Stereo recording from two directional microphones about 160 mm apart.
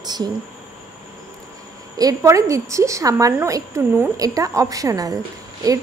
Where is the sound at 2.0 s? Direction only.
20° right (ahead or behind).